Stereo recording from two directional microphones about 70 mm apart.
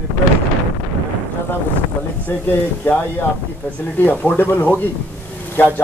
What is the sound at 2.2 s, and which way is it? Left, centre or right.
Speech, left.